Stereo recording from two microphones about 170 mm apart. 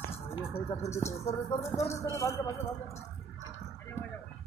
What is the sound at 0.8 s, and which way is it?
Speech, 15° left (ahead or behind).